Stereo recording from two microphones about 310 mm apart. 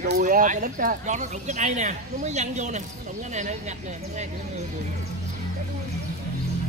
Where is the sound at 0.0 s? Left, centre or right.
Right.